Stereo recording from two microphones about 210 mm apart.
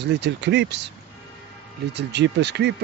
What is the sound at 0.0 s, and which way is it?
Speech, 55° right (ahead or behind).